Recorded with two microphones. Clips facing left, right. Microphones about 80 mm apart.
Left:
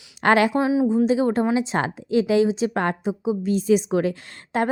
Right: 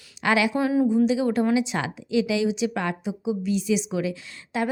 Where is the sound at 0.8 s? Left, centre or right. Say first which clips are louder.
Left 2 dB; left.